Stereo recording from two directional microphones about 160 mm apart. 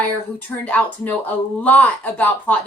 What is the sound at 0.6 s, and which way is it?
A woman's voice, 10° left (ahead or behind).